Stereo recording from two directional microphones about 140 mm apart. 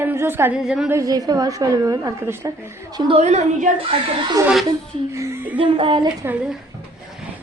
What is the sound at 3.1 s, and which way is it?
Speech, 50° right (ahead or behind).